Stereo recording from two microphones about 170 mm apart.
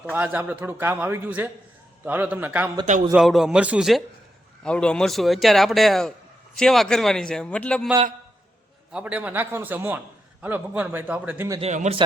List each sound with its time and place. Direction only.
0.1 s a man's voice: 10° right (ahead or behind); by 7.9 s 5° left (ahead or behind)
8.9 s a man's voice: 5° right (ahead or behind)
11.6 s speech: 40° right (ahead or behind)